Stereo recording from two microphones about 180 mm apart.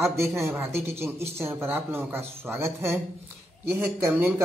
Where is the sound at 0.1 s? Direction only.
15° right (ahead or behind).